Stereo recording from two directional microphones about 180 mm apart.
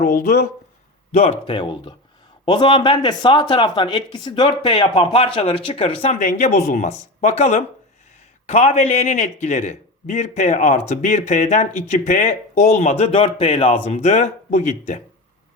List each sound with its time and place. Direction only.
0.0 s speech: 50° left (ahead or behind)
1.1 s a man's voice: 35° left (ahead or behind)